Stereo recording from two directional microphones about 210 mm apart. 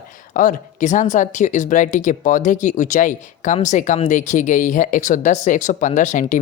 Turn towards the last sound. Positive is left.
turn(degrees=35)  # may be behind; listen again after turning